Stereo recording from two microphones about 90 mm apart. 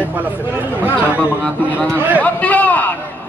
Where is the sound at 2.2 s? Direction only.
15° left (ahead or behind).